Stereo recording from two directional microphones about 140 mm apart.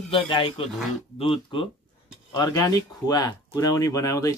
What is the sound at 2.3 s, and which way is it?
A man's voice, 25° left (ahead or behind).